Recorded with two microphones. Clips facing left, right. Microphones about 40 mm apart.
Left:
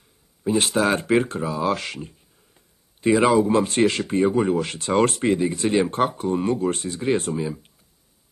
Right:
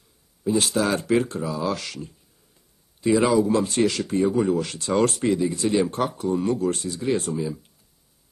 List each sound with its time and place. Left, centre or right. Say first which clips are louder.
0.4 s speech: left 2 dB; left